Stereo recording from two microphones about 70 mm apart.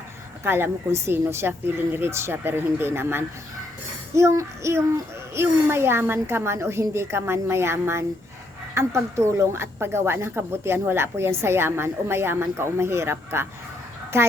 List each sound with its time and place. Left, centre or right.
0.4 s a woman's voice: right
4.1 s child singing: right
5.3 s a woman's voice: right